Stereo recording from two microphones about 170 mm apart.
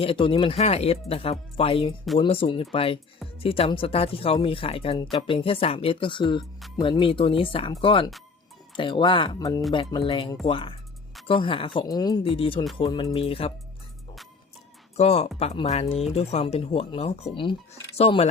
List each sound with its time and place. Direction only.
0.0 s speech: 30° left (ahead or behind)
14.9 s speech: 35° left (ahead or behind)